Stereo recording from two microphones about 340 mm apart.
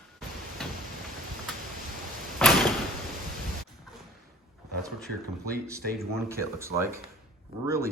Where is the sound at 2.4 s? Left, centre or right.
Centre.